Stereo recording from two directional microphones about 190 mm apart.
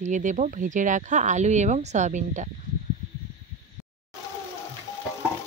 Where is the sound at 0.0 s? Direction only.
40° right (ahead or behind).